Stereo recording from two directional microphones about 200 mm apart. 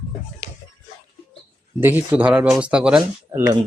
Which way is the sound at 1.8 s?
10° right (ahead or behind).